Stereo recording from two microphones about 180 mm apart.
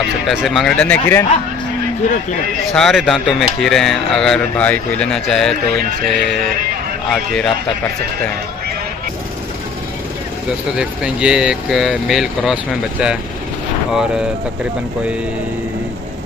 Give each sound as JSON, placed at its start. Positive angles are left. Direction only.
{"t": 0.3, "sound": "speech", "side_deg": 0}
{"t": 2.7, "sound": "speech", "side_deg": 0}
{"t": 10.8, "sound": "speech", "side_deg": -5}